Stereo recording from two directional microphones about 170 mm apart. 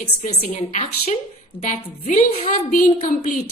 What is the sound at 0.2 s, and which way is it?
A woman's voice, 45° left (ahead or behind).